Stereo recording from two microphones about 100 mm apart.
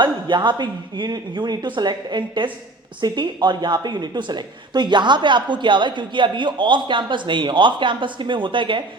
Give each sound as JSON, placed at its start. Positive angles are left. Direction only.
{"t": 0.0, "sound": "speech", "side_deg": -50}